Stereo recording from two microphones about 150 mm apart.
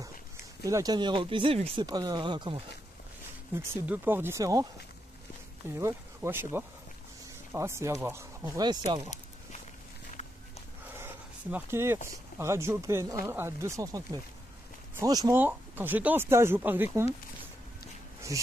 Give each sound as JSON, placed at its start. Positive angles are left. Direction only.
{"t": 0.7, "sound": "speech", "side_deg": -25}
{"t": 1.9, "sound": "speech", "side_deg": -25}
{"t": 3.5, "sound": "speech", "side_deg": -15}
{"t": 5.8, "sound": "speech", "side_deg": -15}
{"t": 8.6, "sound": "speech", "side_deg": -30}
{"t": 11.0, "sound": "dog", "side_deg": -15}
{"t": 12.4, "sound": "speech", "side_deg": -20}
{"t": 15.3, "sound": "speech", "side_deg": -10}
{"t": 18.3, "sound": "speech", "side_deg": -20}